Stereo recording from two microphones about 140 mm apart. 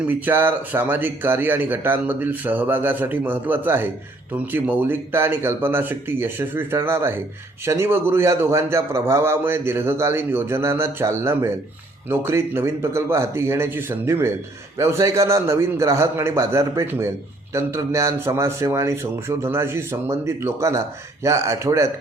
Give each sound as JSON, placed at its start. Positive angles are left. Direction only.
{"t": 0.1, "sound": "a man's voice", "side_deg": -15}